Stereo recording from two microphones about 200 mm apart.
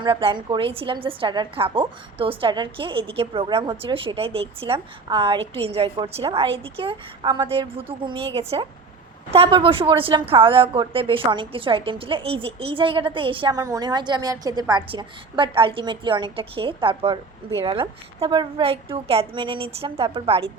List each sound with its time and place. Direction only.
0.0 s a woman's voice: 25° right (ahead or behind)